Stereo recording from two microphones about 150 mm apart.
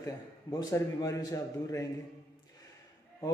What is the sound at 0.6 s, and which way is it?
A man's voice, 25° left (ahead or behind).